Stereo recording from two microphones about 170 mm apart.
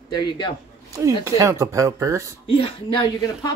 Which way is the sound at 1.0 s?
15° right (ahead or behind).